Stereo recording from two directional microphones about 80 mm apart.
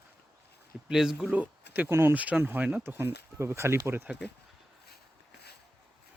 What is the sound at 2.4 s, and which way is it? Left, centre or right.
Speech, right.